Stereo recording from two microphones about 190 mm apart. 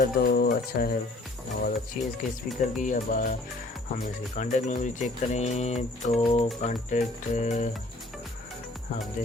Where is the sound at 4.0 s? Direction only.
40° left (ahead or behind).